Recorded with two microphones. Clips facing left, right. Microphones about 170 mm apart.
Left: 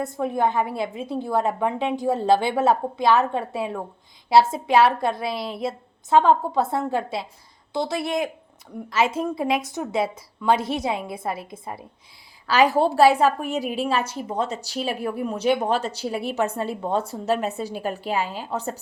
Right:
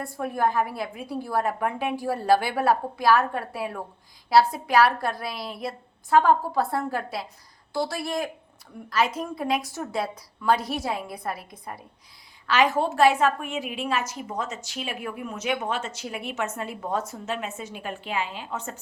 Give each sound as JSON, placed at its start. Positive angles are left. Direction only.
{"t": 0.0, "sound": "a woman's voice", "side_deg": 20}
{"t": 5.3, "sound": "a woman's voice", "side_deg": 0}
{"t": 5.5, "sound": "a woman's voice", "side_deg": 25}
{"t": 10.5, "sound": "a woman's voice", "side_deg": 0}
{"t": 11.1, "sound": "a woman's voice", "side_deg": 25}